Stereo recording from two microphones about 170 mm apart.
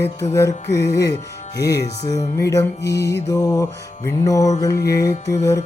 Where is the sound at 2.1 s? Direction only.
20° left (ahead or behind).